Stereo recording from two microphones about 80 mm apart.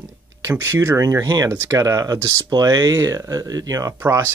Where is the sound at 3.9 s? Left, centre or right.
Right.